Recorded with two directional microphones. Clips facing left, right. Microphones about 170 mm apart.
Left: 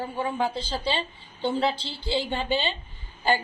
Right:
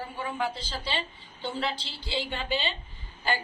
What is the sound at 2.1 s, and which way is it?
Speech, 30° left (ahead or behind).